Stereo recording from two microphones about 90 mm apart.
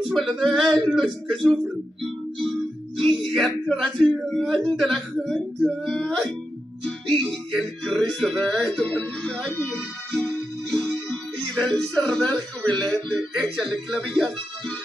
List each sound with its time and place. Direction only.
0.1 s speech: 5° left (ahead or behind)
3.0 s speech: 5° left (ahead or behind)
7.1 s music: 10° left (ahead or behind)
8.0 s speech: 10° left (ahead or behind)
9.6 s music: 20° left (ahead or behind)
12.9 s speech: 15° left (ahead or behind)
13.6 s speech: 5° left (ahead or behind)